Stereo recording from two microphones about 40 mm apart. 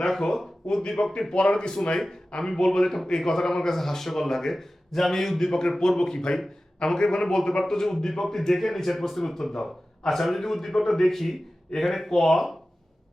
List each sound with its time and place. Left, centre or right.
0.0 s speech: centre